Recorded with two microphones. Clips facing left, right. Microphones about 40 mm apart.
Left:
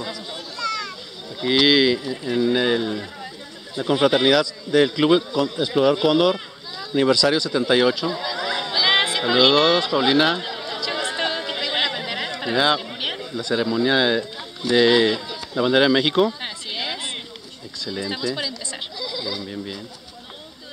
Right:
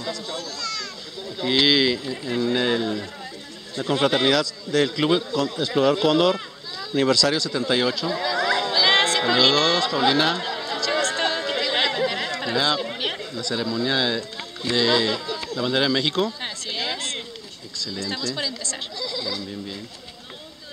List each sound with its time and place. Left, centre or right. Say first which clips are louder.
0.0 s children playing: right 1 dB; centre
1.4 s a man's voice: left 2 dB; centre
8.4 s chatter: right 4 dB; centre
9.5 s a man's voice: left 3 dB; centre
10.6 s chatter: right 2 dB; centre
13.0 s chatter: even; centre
13.3 s speech: left 4 dB; left
15.0 s speech: left 2 dB; centre
15.5 s a man's voice: left 5 dB; left